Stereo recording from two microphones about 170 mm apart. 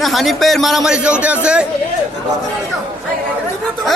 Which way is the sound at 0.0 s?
Centre (ahead or behind).